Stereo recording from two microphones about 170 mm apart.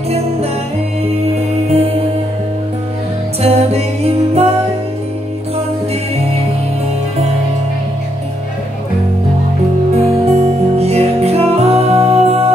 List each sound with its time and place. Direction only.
3.4 s music: 35° right (ahead or behind)
9.9 s music: 35° right (ahead or behind)